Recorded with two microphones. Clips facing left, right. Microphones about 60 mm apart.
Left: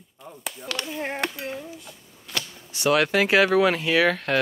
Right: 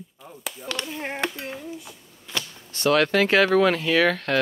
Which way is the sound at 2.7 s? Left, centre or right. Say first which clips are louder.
Right 1 dB; centre.